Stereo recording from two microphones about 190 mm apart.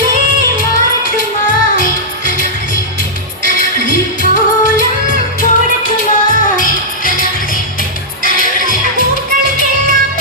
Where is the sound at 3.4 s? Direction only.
45° left (ahead or behind).